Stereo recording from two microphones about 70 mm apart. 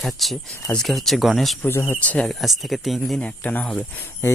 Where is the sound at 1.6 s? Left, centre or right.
Left.